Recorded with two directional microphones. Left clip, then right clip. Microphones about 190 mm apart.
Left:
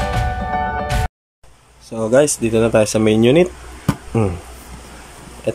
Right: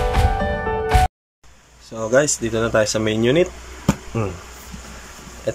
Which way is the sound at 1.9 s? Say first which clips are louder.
Left 3 dB; 15° left (ahead or behind).